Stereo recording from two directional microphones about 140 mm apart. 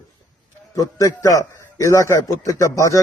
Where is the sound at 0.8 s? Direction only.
25° left (ahead or behind).